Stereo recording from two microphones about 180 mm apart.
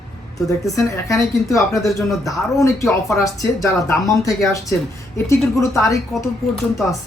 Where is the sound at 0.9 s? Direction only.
15° left (ahead or behind).